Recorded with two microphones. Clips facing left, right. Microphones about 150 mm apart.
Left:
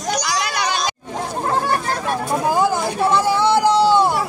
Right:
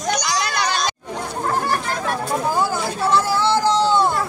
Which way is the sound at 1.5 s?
25° left (ahead or behind).